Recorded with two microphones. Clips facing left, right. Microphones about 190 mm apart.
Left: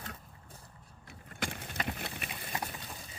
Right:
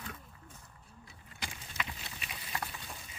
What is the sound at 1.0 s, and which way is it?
Vehicle, 60° left (ahead or behind).